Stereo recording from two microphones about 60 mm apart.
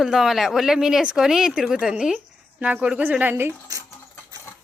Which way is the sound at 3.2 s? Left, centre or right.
Right.